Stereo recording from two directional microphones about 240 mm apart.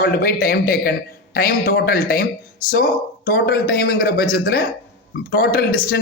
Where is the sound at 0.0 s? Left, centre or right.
Left.